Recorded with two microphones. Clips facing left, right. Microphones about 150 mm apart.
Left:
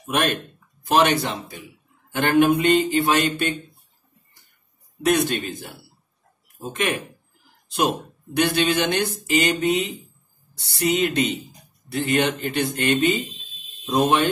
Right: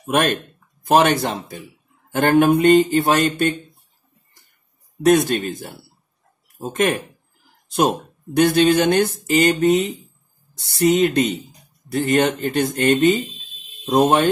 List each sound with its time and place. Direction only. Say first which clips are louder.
0.0 s speech: right 4 dB; 40° right (ahead or behind)
5.0 s speech: right 5 dB; 45° right (ahead or behind)
8.4 s speech: right 6 dB; 45° right (ahead or behind)